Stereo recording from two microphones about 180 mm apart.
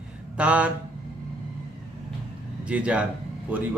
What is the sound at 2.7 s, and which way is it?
Speech, 5° right (ahead or behind).